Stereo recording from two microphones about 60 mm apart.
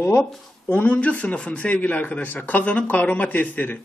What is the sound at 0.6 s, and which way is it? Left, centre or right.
A man's voice, left.